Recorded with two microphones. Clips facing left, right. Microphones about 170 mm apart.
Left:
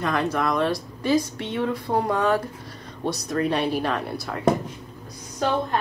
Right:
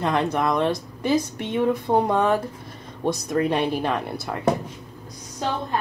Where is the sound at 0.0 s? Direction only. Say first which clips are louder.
Right 2 dB; 25° right (ahead or behind).